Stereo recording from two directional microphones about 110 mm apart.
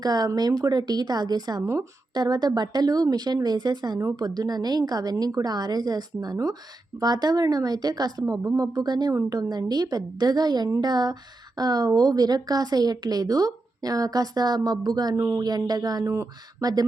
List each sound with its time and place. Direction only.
0.0 s speech: 35° right (ahead or behind)
15.2 s speech: 25° right (ahead or behind)
15.4 s speech: 35° right (ahead or behind)